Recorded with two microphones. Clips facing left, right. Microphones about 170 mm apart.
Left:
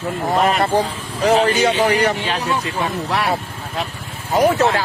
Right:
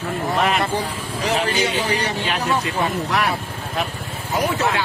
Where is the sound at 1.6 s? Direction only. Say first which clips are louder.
Left 6 dB; 60° left (ahead or behind).